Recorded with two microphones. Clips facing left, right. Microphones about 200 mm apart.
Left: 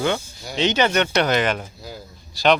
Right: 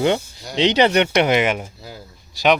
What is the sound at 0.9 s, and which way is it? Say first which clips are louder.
Speech: right 3 dB; 20° right (ahead or behind).